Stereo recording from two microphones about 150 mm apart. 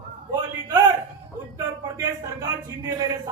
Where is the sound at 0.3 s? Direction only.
25° right (ahead or behind).